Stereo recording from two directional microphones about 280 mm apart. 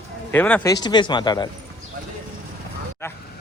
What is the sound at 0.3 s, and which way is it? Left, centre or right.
Speech, centre.